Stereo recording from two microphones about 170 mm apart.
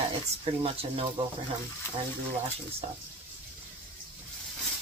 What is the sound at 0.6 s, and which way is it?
Speech, 30° right (ahead or behind).